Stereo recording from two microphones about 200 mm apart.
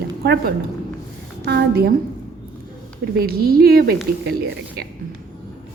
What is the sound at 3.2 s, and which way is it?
Speech, 50° right (ahead or behind).